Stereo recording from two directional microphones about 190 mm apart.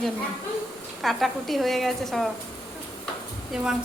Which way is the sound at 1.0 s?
Centre (ahead or behind).